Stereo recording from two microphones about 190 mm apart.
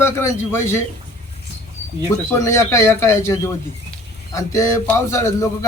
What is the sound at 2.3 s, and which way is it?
A man's voice, 15° left (ahead or behind).